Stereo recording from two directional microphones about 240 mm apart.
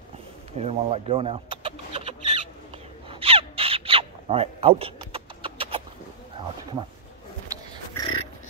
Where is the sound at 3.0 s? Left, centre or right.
Right.